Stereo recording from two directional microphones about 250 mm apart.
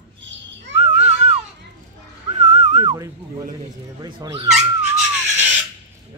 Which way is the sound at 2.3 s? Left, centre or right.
Right.